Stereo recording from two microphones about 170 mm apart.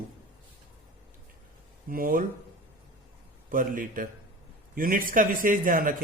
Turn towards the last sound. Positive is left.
turn(degrees=-55)  # may be behind; listen again after turning